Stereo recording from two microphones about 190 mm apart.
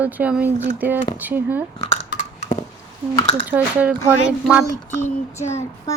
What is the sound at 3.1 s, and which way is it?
Speech, 25° left (ahead or behind).